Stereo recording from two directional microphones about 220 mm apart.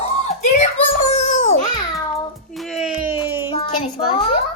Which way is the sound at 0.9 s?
30° left (ahead or behind).